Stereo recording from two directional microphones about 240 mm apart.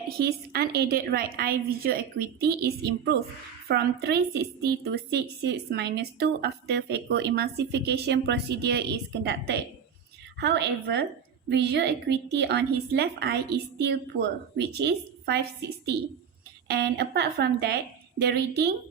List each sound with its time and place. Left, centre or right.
0.3 s a woman's voice: right
16.6 s a woman's voice: right